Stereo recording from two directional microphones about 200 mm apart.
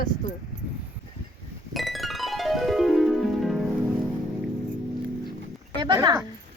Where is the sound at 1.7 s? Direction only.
Centre (ahead or behind).